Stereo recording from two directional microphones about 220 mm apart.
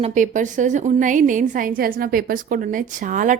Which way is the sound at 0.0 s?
35° right (ahead or behind).